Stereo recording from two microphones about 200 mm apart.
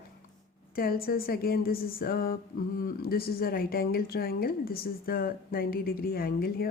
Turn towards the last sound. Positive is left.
turn(degrees=50)  # may be behind; listen again after turning